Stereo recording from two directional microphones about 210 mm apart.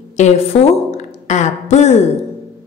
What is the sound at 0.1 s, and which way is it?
A woman's voice, 35° left (ahead or behind).